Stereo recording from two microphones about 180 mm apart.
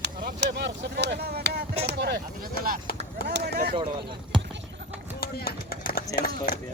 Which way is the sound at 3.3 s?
60° right (ahead or behind).